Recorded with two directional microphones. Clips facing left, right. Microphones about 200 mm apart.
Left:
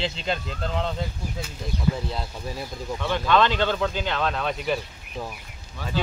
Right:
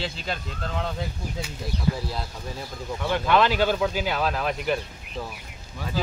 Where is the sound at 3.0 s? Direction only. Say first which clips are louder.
Even; 10° right (ahead or behind).